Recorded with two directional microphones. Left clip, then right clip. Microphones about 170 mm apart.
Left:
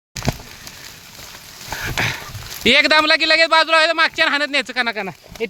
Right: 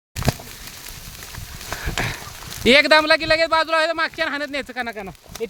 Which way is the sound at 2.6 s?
10° left (ahead or behind).